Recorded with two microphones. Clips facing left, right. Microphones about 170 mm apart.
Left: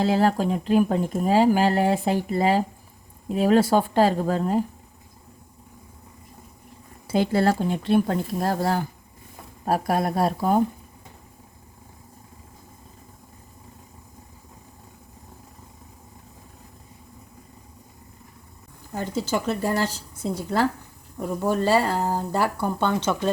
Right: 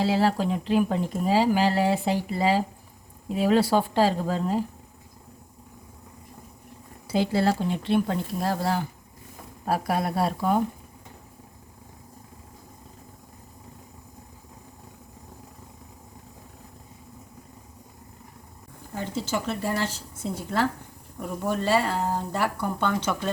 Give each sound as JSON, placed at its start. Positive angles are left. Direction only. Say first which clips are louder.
{"t": 0.0, "sound": "speech", "louder": "left 2 dB", "side_deg": 50}
{"t": 7.1, "sound": "speech", "louder": "left 2 dB", "side_deg": 50}
{"t": 18.9, "sound": "speech", "louder": "left 3 dB", "side_deg": 45}
{"t": 21.2, "sound": "speech", "louder": "left 4 dB", "side_deg": 35}